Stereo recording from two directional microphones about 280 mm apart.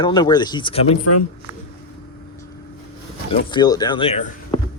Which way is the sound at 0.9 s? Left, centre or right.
Left.